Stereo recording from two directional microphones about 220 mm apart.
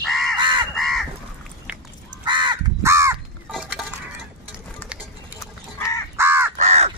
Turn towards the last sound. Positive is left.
turn(degrees=-30)  # may be behind; listen again after turning